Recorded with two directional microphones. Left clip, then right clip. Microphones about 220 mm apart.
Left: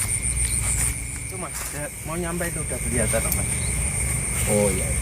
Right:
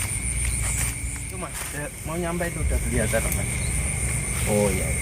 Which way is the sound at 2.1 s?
10° right (ahead or behind).